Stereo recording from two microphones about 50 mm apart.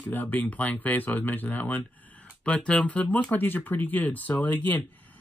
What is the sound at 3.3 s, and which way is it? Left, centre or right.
Speech, left.